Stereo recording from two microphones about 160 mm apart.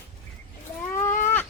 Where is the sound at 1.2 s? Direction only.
10° left (ahead or behind).